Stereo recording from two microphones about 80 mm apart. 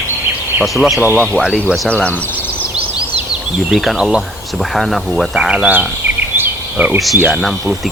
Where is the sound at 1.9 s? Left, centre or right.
Centre.